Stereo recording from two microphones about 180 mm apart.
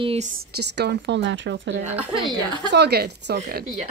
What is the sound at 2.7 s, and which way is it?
Speech, 65° right (ahead or behind).